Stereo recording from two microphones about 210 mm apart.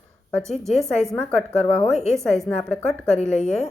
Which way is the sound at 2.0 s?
15° right (ahead or behind).